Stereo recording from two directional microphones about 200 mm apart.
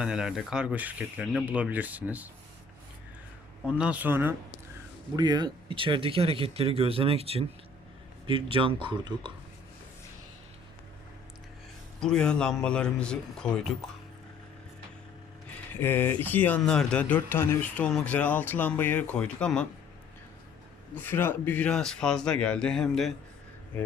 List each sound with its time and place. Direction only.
0.0 s speech: 5° right (ahead or behind)
3.7 s speech: 5° right (ahead or behind); by 9.3 s 25° right (ahead or behind)
11.9 s speech: 5° left (ahead or behind)
15.7 s a man's voice: 10° left (ahead or behind)
20.9 s speech: 10° left (ahead or behind)